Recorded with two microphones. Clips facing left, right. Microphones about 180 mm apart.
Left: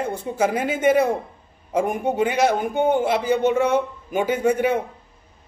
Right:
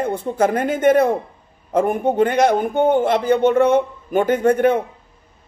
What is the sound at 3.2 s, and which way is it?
Speech, 55° right (ahead or behind).